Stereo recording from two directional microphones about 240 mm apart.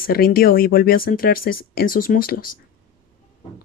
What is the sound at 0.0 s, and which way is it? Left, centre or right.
Speech, left.